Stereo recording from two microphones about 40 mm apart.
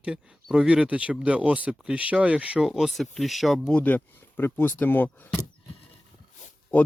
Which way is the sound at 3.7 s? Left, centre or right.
Left.